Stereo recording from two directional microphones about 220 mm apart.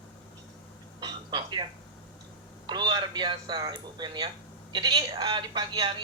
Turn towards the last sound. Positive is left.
turn(degrees=-20)  # may be behind; listen again after turning